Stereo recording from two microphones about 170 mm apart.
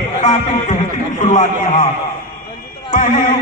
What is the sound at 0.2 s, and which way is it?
A man's voice, 45° left (ahead or behind).